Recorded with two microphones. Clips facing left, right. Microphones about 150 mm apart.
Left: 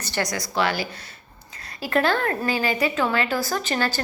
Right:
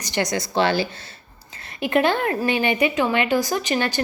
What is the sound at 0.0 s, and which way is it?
Speech, 20° right (ahead or behind).